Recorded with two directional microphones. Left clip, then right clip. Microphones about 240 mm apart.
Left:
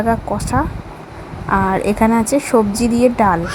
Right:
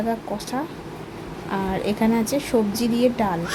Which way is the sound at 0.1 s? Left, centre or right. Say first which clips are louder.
Left 9 dB; centre.